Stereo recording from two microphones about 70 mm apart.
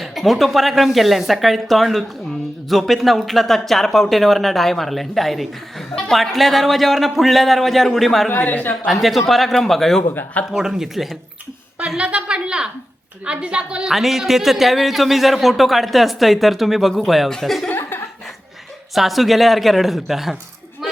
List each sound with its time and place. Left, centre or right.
0.0 s a man's voice: centre
8.3 s speech: left
8.9 s a man's voice: centre
10.5 s a woman's voice: centre
11.8 s a woman's voice: centre
13.9 s a man's voice: centre
17.7 s chuckle: left
18.9 s a man's voice: centre